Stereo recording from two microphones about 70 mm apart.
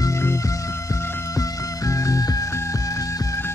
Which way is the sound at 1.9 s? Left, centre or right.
Left.